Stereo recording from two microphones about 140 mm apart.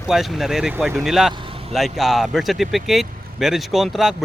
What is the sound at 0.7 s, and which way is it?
Speech, 15° right (ahead or behind).